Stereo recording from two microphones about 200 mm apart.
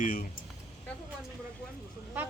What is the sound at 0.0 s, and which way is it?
Speech, 45° left (ahead or behind).